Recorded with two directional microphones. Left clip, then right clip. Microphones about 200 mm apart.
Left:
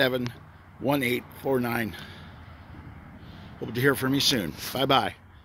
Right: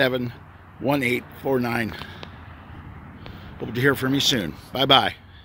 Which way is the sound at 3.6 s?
Centre (ahead or behind).